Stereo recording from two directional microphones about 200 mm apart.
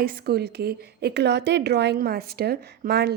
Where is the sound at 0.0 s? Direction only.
55° right (ahead or behind).